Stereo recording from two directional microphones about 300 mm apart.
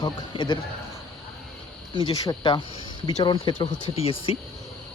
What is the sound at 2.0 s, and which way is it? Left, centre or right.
Speech, centre.